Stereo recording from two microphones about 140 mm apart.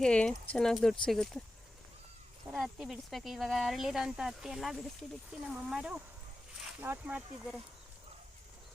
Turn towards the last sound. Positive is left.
turn(degrees=-10)  # may be behind; listen again after turning